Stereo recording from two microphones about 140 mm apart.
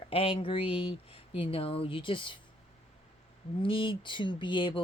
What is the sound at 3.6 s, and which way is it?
Speech, 35° left (ahead or behind).